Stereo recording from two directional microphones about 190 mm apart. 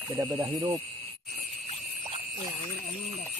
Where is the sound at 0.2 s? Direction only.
15° right (ahead or behind).